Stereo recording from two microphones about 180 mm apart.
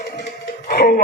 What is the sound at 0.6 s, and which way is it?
Music, 55° left (ahead or behind).